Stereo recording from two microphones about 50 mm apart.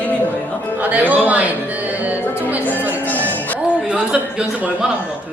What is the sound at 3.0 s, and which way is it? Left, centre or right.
Music, left.